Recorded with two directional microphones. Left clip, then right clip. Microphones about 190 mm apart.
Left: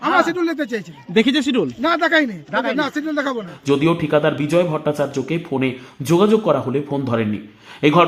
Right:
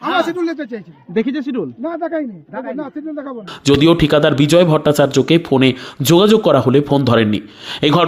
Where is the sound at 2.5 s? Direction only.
65° left (ahead or behind).